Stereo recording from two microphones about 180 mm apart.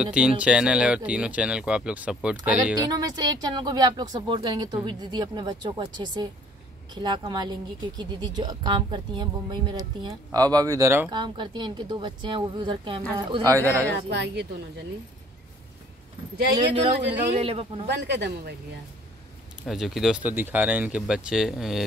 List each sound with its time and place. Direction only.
0.0 s speech: 5° right (ahead or behind)
3.0 s speech: 20° right (ahead or behind)
14.0 s speech: 70° right (ahead or behind)
17.4 s speech: 30° right (ahead or behind)
17.8 s speech: 70° right (ahead or behind)
19.6 s speech: centre (ahead or behind)